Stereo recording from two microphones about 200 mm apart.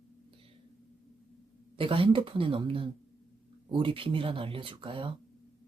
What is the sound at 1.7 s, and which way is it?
Speech, 25° right (ahead or behind).